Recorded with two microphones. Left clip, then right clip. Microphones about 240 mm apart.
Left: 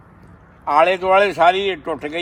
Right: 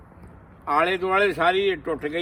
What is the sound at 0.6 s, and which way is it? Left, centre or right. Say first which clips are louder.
A man's voice: left 7 dB; centre.